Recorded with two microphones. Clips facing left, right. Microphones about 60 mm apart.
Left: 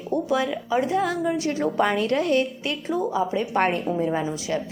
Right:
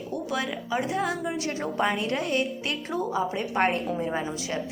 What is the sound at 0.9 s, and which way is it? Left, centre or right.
A woman's voice, right.